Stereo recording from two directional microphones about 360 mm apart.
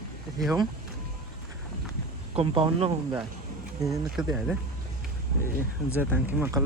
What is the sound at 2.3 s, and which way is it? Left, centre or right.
Speech, centre.